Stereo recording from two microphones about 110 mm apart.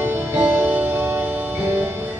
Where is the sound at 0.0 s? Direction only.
20° right (ahead or behind).